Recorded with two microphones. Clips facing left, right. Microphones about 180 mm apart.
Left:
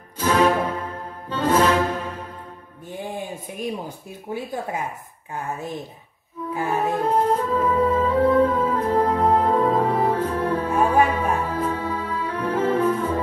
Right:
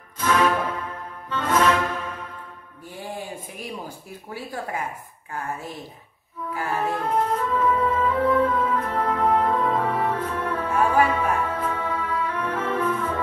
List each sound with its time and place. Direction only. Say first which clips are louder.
0.2 s music: left 3 dB; 35° left (ahead or behind)
2.9 s a sound: left 3 dB; 20° left (ahead or behind)
4.3 s music: left 6 dB; 20° left (ahead or behind)
6.5 s music: left 3 dB; 20° left (ahead or behind)
7.0 s music: left 3 dB; 35° left (ahead or behind)